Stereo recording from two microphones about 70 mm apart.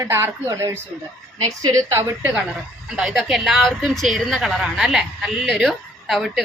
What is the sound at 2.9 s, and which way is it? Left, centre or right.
A woman's voice, centre.